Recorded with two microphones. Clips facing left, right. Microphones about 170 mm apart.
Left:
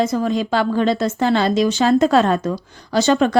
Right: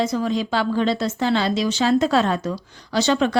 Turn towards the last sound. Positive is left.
turn(degrees=45)  # may be behind; listen again after turning